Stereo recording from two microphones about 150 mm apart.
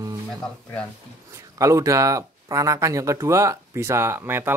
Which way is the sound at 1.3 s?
20° right (ahead or behind).